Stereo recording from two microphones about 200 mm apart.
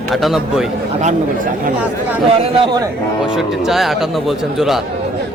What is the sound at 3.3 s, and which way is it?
A man's voice, centre (ahead or behind).